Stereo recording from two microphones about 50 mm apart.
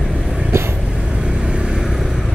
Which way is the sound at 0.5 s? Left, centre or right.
Right.